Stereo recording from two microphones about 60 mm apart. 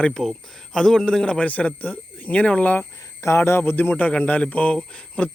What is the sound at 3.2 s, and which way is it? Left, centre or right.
Speech, left.